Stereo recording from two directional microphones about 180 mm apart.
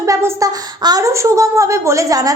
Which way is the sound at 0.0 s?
15° right (ahead or behind).